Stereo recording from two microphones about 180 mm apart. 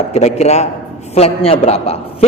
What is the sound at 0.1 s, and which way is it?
A man's voice, 35° left (ahead or behind).